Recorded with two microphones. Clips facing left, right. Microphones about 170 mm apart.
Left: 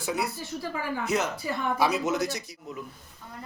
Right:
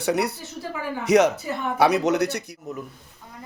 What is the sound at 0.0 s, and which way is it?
Speech, 70° right (ahead or behind).